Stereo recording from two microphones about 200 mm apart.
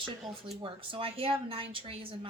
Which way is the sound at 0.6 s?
25° right (ahead or behind).